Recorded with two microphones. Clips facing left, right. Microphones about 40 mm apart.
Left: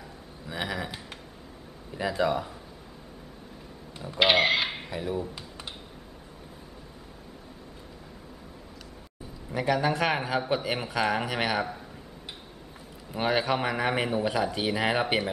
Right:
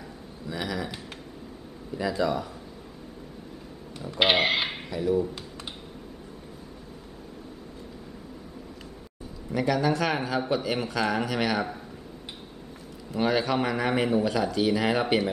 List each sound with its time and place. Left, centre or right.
0.5 s a man's voice: left
2.0 s a man's voice: left
4.2 s speech: centre
4.8 s speech: centre
9.5 s speech: centre
13.1 s speech: centre